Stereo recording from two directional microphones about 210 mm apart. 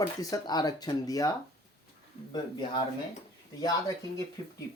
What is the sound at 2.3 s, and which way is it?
Speech, 20° left (ahead or behind).